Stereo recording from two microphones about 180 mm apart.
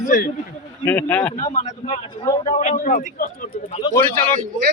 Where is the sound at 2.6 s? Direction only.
45° left (ahead or behind).